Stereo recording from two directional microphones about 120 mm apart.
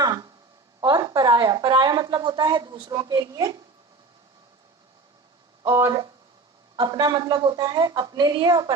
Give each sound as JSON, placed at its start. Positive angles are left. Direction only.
{"t": 0.0, "sound": "a sound", "side_deg": -35}
{"t": 0.8, "sound": "a woman's voice", "side_deg": -35}
{"t": 5.6, "sound": "a woman's voice", "side_deg": -30}